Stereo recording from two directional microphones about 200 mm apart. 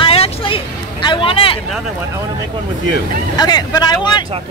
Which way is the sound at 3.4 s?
20° left (ahead or behind).